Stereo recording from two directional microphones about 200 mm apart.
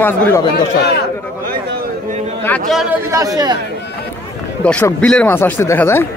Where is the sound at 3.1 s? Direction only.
15° right (ahead or behind).